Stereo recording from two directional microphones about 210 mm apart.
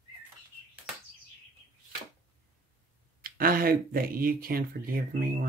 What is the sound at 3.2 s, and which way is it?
Speech, 45° right (ahead or behind).